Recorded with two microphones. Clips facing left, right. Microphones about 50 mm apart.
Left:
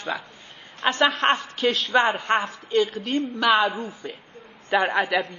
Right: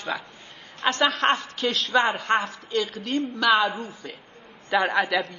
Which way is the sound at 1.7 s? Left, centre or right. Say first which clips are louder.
Left 2 dB; centre.